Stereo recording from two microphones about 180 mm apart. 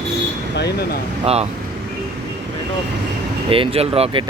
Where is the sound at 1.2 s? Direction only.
35° right (ahead or behind).